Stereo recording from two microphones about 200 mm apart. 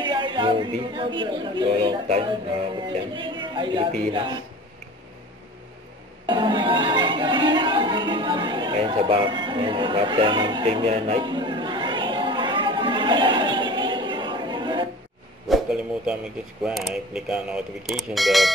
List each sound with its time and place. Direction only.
0.0 s speech: 25° right (ahead or behind)
6.2 s music: 25° right (ahead or behind)
15.4 s a man's voice: centre (ahead or behind)